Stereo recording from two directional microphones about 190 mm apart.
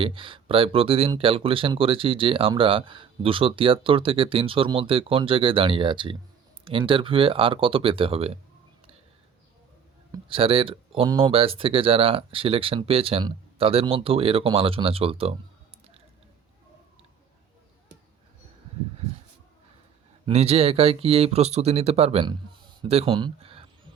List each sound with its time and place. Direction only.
0.0 s speech: 30° right (ahead or behind)
10.1 s speech: 30° right (ahead or behind)
20.2 s speech: 30° right (ahead or behind)